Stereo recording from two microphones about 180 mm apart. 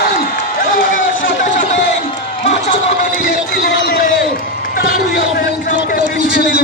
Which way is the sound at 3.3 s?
55° left (ahead or behind).